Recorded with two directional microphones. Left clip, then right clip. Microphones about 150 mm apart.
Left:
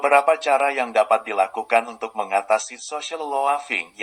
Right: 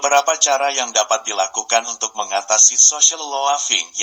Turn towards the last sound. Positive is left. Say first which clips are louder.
# right 5 dB
turn(degrees=-25)  # may be behind; listen again after turning